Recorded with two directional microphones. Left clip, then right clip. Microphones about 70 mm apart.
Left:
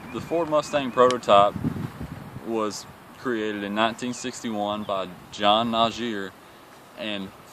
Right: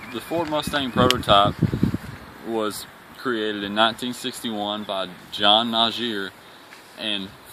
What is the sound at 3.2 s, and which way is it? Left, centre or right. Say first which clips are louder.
Speech: right 2 dB; left.